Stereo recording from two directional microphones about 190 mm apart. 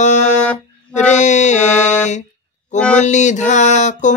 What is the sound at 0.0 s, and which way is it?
Music, 40° left (ahead or behind).